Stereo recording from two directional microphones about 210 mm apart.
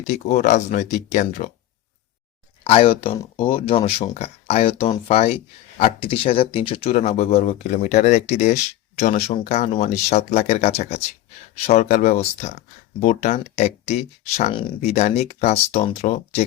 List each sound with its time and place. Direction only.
0.3 s speech: 35° left (ahead or behind)
2.6 s speech: 25° left (ahead or behind)